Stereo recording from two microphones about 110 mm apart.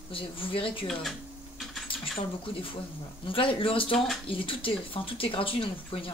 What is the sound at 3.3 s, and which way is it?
Speech, 55° left (ahead or behind).